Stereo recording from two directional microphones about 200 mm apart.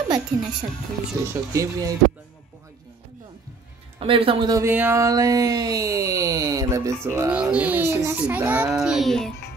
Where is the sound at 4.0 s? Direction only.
25° right (ahead or behind).